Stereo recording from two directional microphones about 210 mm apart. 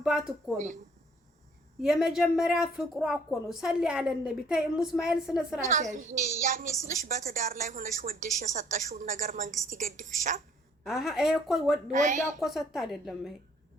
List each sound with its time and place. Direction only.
0.0 s speech: 5° right (ahead or behind)
0.5 s a woman's voice: 35° right (ahead or behind)
1.8 s a woman's voice: centre (ahead or behind)
5.7 s a woman's voice: 35° right (ahead or behind)
10.8 s a woman's voice: centre (ahead or behind)
11.9 s a woman's voice: 35° right (ahead or behind)
12.4 s a woman's voice: centre (ahead or behind)